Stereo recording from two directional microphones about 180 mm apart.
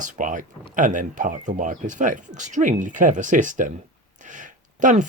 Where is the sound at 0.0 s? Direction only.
45° right (ahead or behind).